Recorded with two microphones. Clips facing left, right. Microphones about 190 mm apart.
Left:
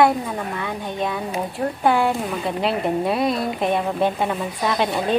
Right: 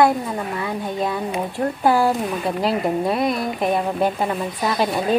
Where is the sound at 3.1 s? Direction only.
30° left (ahead or behind).